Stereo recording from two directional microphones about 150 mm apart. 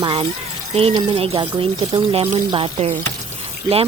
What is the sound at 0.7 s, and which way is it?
Speech, 40° right (ahead or behind).